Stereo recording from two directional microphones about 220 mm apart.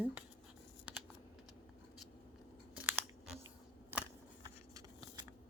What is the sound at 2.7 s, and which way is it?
Crunch, 5° right (ahead or behind).